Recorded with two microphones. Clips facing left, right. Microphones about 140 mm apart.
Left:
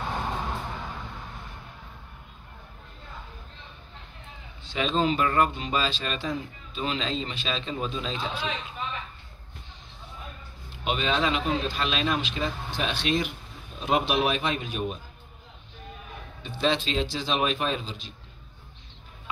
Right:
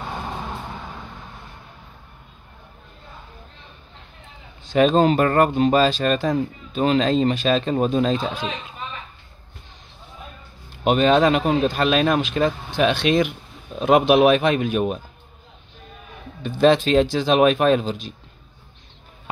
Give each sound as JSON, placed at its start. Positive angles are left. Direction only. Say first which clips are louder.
{"t": 4.6, "sound": "speech", "louder": "right 9 dB", "side_deg": -50}
{"t": 10.8, "sound": "speech", "louder": "right 10 dB", "side_deg": -50}
{"t": 16.4, "sound": "speech", "louder": "right 10 dB", "side_deg": -50}